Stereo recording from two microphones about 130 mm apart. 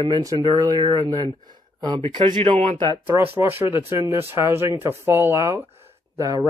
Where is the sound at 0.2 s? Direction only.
30° right (ahead or behind).